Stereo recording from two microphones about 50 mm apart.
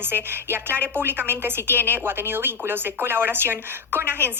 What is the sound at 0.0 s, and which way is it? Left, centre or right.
A woman's voice, right.